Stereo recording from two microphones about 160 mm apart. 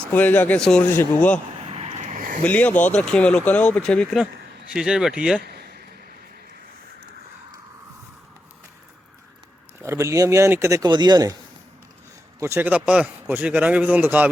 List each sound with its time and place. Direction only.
0.1 s speech: 10° left (ahead or behind)
1.7 s vehicle: 45° right (ahead or behind)
2.4 s speech: 10° left (ahead or behind)
9.8 s speech: 15° right (ahead or behind)
12.4 s a man's voice: 15° right (ahead or behind)